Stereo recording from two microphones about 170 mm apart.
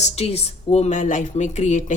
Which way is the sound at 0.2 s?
40° left (ahead or behind).